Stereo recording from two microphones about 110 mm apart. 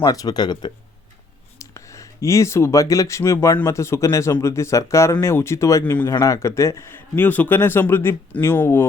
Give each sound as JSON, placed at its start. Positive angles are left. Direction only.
{"t": 0.0, "sound": "speech", "side_deg": 35}
{"t": 1.5, "sound": "a man's voice", "side_deg": 30}
{"t": 5.8, "sound": "speech", "side_deg": 15}
{"t": 6.1, "sound": "a man's voice", "side_deg": 30}